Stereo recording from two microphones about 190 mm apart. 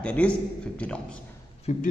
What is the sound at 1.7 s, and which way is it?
Speech, 35° left (ahead or behind).